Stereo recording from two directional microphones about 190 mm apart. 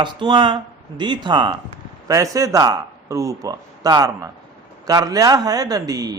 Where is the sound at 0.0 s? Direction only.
25° right (ahead or behind).